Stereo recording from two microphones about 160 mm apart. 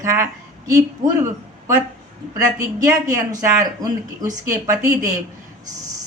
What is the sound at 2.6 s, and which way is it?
Speech, 20° right (ahead or behind).